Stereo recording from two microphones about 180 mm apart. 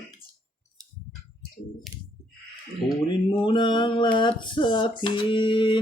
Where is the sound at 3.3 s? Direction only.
25° left (ahead or behind).